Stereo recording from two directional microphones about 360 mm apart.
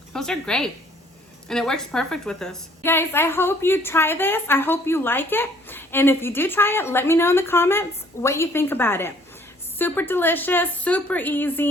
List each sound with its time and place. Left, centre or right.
0.1 s a woman's voice: centre